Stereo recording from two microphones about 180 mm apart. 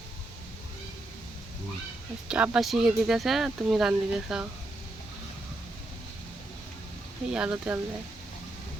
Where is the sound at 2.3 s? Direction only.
5° right (ahead or behind).